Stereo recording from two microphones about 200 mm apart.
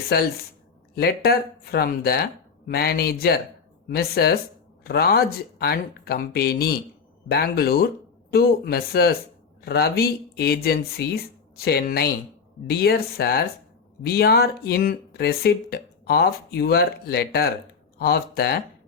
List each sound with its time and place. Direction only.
0.1 s speech: 50° left (ahead or behind)